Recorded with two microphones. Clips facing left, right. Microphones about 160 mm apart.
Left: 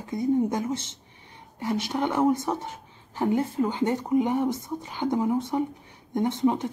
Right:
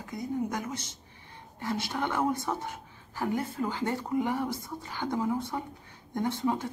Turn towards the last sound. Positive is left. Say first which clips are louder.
# left 5 dB
turn(degrees=20)  # may be behind; listen again after turning